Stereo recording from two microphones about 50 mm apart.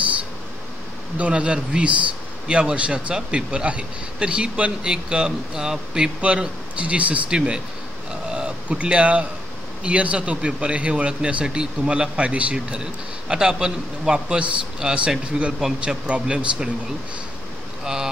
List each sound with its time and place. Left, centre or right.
1.1 s speech: right
8.3 s a sound: centre
8.7 s speech: right
17.8 s speech: centre